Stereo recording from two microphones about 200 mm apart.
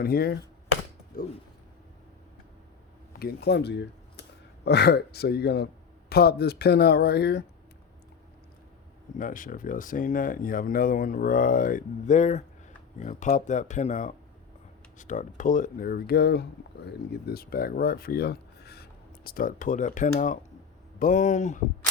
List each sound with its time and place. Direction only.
0.0 s speech: 50° left (ahead or behind)
3.1 s speech: 50° left (ahead or behind)
9.1 s speech: 40° left (ahead or behind)